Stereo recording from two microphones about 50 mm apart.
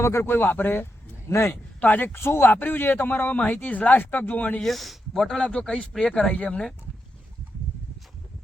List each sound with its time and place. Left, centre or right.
0.0 s speech: left
1.3 s speech: left
1.8 s speech: left
2.1 s speech: left
4.6 s speech: centre
5.5 s speech: centre